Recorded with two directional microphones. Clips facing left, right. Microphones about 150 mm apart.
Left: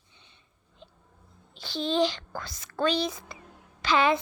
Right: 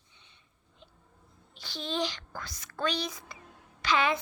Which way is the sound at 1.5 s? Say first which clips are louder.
Left 7 dB; 30° left (ahead or behind).